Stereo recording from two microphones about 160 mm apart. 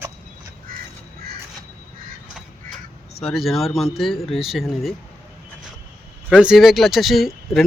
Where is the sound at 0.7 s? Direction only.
65° right (ahead or behind).